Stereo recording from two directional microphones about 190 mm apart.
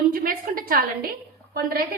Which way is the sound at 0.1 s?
50° right (ahead or behind).